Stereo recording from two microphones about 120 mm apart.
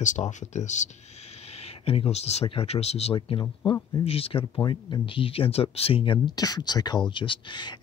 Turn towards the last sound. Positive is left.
turn(degrees=40)  # may be behind; listen again after turning